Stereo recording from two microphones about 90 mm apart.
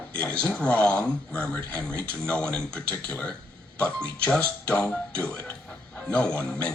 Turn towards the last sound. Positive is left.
turn(degrees=15)  # may be behind; listen again after turning